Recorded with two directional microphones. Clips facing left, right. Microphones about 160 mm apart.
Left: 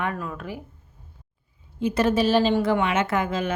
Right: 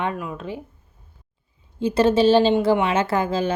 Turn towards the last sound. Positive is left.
turn(degrees=-30)  # may be behind; listen again after turning